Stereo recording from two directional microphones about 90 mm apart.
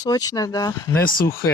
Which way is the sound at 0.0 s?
45° left (ahead or behind).